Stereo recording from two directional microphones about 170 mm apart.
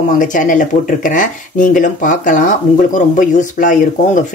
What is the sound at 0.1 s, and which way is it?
Speech, 50° left (ahead or behind).